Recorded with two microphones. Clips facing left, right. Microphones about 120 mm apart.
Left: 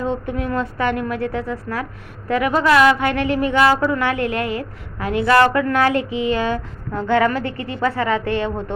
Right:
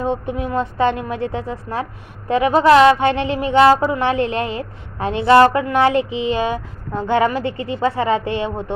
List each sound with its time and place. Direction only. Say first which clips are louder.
0.0 s a woman's voice: right 1 dB; 20° right (ahead or behind)